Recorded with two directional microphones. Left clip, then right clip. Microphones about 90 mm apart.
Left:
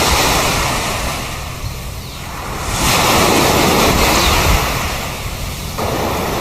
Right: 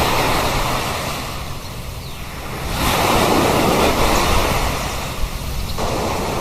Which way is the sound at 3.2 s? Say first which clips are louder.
Left 3 dB; 45° left (ahead or behind).